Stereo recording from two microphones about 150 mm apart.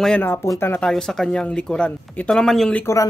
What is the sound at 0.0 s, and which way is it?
Speech, 10° left (ahead or behind).